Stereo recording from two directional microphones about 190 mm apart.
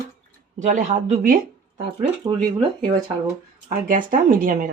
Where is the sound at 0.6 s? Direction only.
40° right (ahead or behind).